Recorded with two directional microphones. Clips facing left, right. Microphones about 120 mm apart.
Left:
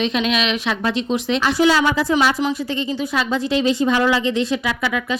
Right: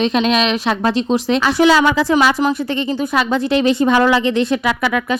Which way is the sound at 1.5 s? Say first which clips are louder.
Right 3 dB; 85° right.